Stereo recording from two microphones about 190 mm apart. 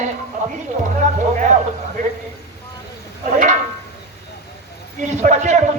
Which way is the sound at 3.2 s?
40° right (ahead or behind).